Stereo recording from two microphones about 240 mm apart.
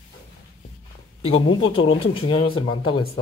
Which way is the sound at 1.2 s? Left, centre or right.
Left.